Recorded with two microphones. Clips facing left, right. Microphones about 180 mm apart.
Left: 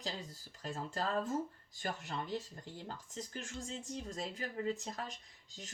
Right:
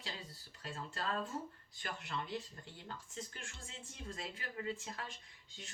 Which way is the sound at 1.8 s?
40° left (ahead or behind).